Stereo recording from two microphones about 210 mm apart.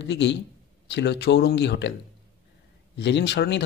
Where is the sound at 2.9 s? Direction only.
55° left (ahead or behind).